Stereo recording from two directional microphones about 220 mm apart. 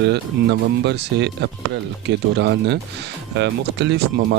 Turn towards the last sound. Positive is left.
turn(degrees=-50)  # may be behind; listen again after turning